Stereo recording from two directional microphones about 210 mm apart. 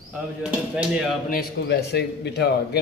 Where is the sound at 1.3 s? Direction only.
50° left (ahead or behind).